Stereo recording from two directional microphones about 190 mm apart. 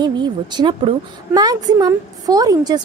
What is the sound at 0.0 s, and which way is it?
A woman's voice, 25° right (ahead or behind).